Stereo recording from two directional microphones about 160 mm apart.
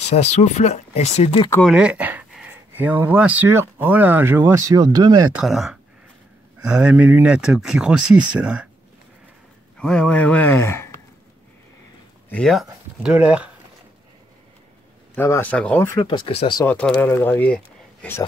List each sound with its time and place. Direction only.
0.1 s speech: 45° left (ahead or behind)
1.6 s speech: 5° right (ahead or behind); by 5.3 s 25° right (ahead or behind)
5.3 s speech: centre (ahead or behind)
9.8 s speech: 5° left (ahead or behind)
12.3 s speech: 5° left (ahead or behind)
13.0 s speech: 10° right (ahead or behind)
15.1 s speech: 15° left (ahead or behind)
16.0 s speech: 30° left (ahead or behind)
16.6 s speech: 10° left (ahead or behind)